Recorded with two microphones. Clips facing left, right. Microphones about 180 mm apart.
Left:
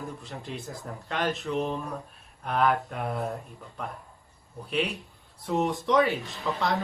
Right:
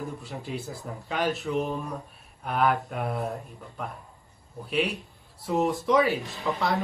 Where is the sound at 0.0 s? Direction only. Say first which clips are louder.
Right 2 dB; centre (ahead or behind).